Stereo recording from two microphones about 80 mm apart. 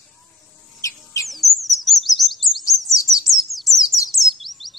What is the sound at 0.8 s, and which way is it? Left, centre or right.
Chirp, left.